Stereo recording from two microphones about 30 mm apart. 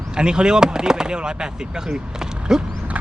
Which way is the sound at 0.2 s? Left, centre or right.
Right.